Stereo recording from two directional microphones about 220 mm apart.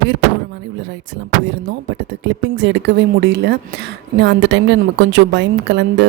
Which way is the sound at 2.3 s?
55° right (ahead or behind).